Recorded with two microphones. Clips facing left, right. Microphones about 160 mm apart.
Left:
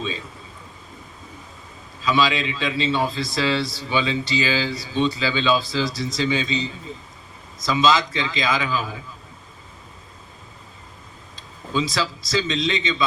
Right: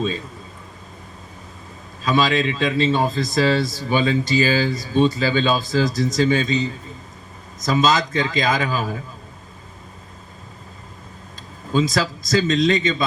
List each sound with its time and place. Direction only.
2.0 s a man's voice: 50° right (ahead or behind)
11.7 s a man's voice: 45° right (ahead or behind)